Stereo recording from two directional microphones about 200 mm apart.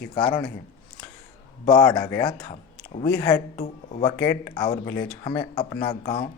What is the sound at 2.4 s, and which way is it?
Speech, 25° left (ahead or behind).